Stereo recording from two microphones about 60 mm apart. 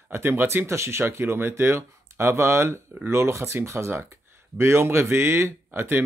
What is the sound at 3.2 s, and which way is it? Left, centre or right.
Speech, right.